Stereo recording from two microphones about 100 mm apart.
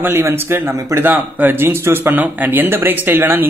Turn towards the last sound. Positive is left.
turn(degrees=-20)  # may be behind; listen again after turning